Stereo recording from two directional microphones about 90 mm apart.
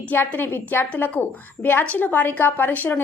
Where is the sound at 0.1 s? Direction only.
20° left (ahead or behind).